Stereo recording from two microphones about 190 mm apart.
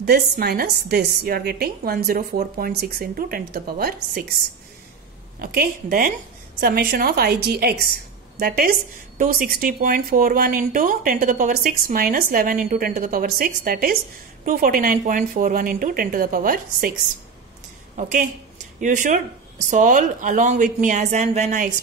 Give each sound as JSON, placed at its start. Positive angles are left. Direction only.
{"t": 0.0, "sound": "a woman's voice", "side_deg": -55}
{"t": 5.4, "sound": "speech", "side_deg": -50}
{"t": 17.9, "sound": "a woman's voice", "side_deg": -45}